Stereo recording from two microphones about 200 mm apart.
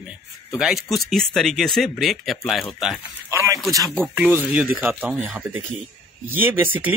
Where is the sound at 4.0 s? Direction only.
5° right (ahead or behind).